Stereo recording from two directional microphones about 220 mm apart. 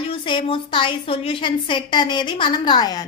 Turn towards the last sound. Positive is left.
turn(degrees=15)  # may be behind; listen again after turning